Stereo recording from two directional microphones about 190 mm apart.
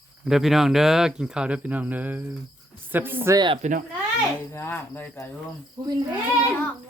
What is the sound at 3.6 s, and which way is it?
Speech, 40° right (ahead or behind).